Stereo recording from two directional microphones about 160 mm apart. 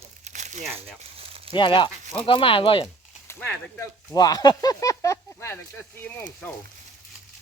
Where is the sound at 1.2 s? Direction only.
40° right (ahead or behind).